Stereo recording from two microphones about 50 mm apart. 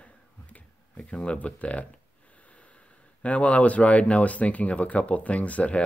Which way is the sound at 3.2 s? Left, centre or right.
Left.